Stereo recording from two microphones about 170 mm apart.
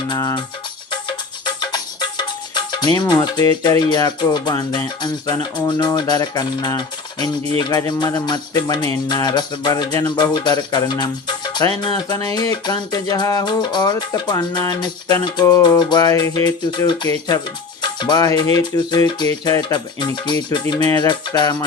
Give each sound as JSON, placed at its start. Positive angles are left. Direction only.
{"t": 0.1, "sound": "speech", "side_deg": 25}
{"t": 0.9, "sound": "music", "side_deg": 25}
{"t": 7.6, "sound": "speech", "side_deg": 25}